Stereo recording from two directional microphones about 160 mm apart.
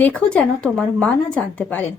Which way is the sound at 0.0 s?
10° left (ahead or behind).